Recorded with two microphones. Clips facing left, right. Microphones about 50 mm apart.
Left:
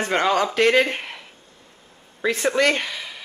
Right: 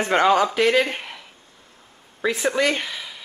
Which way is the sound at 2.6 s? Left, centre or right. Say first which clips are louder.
Left 2 dB; centre.